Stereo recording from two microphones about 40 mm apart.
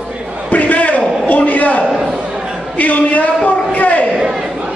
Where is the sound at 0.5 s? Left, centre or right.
Left.